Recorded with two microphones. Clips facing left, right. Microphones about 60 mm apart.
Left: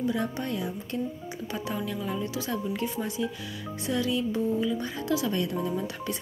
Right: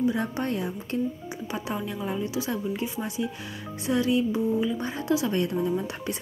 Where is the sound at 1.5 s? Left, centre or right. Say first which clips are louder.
Right 1 dB; right.